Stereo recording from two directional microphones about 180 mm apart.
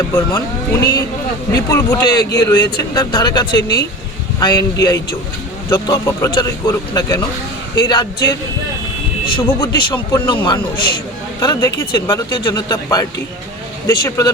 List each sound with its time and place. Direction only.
0.3 s speech: 25° left (ahead or behind)